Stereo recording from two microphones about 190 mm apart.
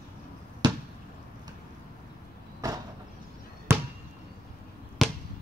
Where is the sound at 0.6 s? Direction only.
25° right (ahead or behind).